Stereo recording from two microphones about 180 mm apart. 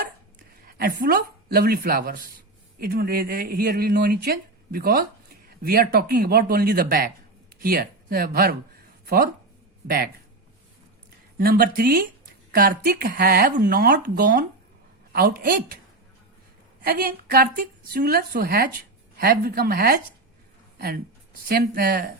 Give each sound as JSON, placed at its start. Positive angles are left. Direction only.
{"t": 0.7, "sound": "speech", "side_deg": -55}
{"t": 11.3, "sound": "speech", "side_deg": -55}
{"t": 16.8, "sound": "speech", "side_deg": -55}